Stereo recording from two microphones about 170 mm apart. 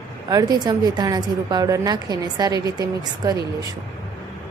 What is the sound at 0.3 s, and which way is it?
A woman's voice, 20° right (ahead or behind).